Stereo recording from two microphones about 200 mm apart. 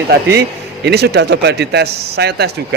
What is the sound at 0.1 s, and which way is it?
A man's voice, 55° right (ahead or behind).